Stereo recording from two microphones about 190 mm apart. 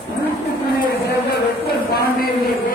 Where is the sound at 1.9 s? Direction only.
55° left (ahead or behind).